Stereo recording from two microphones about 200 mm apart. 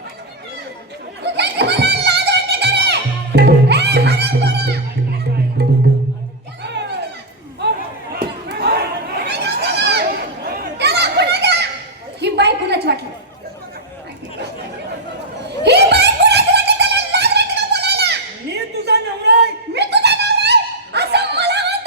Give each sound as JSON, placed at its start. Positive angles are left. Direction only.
{"t": 1.2, "sound": "music", "side_deg": -55}
{"t": 7.6, "sound": "a sound", "side_deg": -60}
{"t": 8.1, "sound": "crowd", "side_deg": -55}
{"t": 10.4, "sound": "children playing", "side_deg": -50}
{"t": 12.2, "sound": "a sound", "side_deg": -60}
{"t": 15.6, "sound": "music", "side_deg": -55}